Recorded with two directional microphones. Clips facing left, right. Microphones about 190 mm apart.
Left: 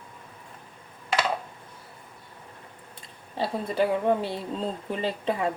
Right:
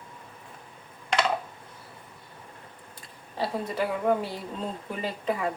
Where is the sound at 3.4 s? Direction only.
25° left (ahead or behind).